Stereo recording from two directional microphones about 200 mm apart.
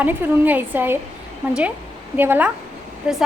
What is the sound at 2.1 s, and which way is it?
Speech, 10° right (ahead or behind).